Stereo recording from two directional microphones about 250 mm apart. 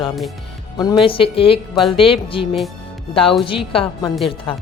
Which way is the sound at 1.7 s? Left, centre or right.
Centre.